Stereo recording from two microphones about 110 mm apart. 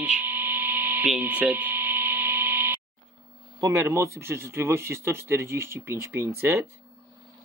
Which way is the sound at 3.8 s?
25° right (ahead or behind).